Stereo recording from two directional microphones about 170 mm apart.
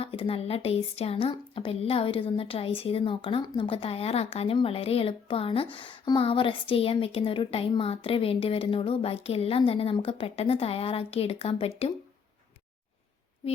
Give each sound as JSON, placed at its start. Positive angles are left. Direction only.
{"t": 0.0, "sound": "a woman's voice", "side_deg": 35}